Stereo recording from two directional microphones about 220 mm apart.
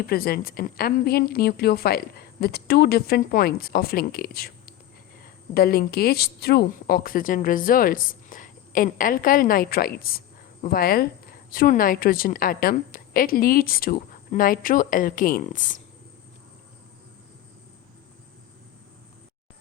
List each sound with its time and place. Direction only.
0.1 s speech: 45° left (ahead or behind)